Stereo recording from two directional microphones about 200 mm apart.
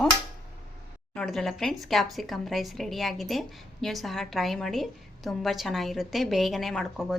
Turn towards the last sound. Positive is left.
turn(degrees=0)  # may be behind; listen again after turning